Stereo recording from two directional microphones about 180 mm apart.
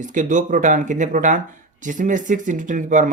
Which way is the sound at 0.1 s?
45° right (ahead or behind).